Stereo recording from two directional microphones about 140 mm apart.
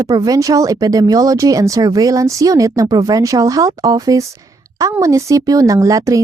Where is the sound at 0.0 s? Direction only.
25° right (ahead or behind).